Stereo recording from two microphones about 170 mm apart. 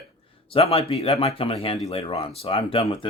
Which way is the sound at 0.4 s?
35° left (ahead or behind).